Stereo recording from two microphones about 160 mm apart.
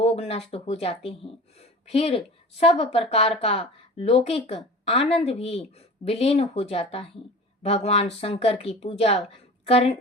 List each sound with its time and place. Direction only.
0.0 s speech: 40° left (ahead or behind)